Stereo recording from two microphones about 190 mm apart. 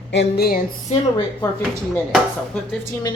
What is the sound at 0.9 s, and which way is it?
Speech, 35° left (ahead or behind).